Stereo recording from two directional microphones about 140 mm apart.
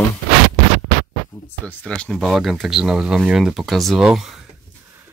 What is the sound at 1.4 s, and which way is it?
Speech, 10° left (ahead or behind).